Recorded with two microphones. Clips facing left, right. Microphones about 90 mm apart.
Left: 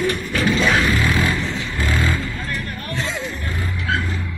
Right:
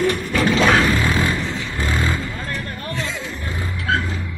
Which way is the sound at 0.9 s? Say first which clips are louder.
Even; 25° right (ahead or behind).